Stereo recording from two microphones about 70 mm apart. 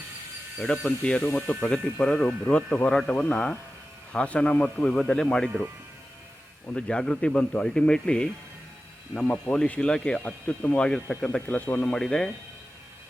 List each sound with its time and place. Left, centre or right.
0.6 s speech: centre
6.7 s speech: centre
11.9 s speech: centre